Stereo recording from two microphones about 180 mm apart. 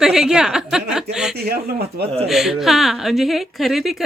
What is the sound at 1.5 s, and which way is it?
Speech, 60° right (ahead or behind).